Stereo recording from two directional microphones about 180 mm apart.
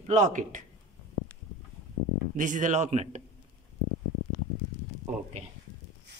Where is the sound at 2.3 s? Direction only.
45° right (ahead or behind).